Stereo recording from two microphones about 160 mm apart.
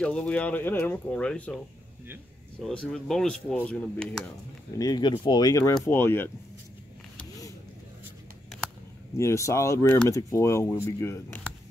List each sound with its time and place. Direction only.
0.0 s speech: 5° left (ahead or behind)
2.6 s speech: 5° left (ahead or behind)
4.7 s speech: 25° left (ahead or behind)
9.2 s speech: 20° left (ahead or behind)